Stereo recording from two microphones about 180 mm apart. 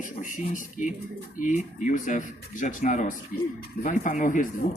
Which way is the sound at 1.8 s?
45° left (ahead or behind).